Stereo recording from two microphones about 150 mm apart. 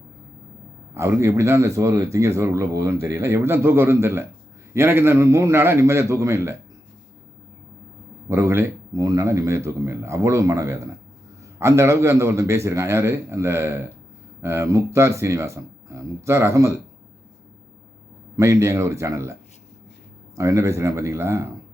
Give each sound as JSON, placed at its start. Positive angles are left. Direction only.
{"t": 0.9, "sound": "a man's voice", "side_deg": -15}
{"t": 8.3, "sound": "a man's voice", "side_deg": -15}
{"t": 18.3, "sound": "speech", "side_deg": -20}